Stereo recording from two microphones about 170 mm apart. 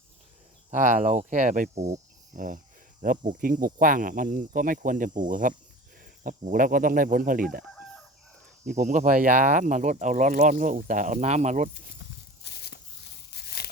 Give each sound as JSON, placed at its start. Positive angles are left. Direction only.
{"t": 0.7, "sound": "speech", "side_deg": -50}
{"t": 7.6, "sound": "chicken", "side_deg": 0}
{"t": 8.6, "sound": "speech", "side_deg": -45}
{"t": 12.4, "sound": "a sound", "side_deg": 70}
{"t": 13.3, "sound": "tearing", "side_deg": 70}